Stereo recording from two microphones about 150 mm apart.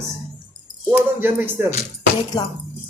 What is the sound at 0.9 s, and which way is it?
Speech, 10° right (ahead or behind).